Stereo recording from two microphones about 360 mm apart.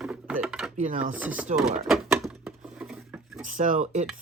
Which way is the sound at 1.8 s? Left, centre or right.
Centre.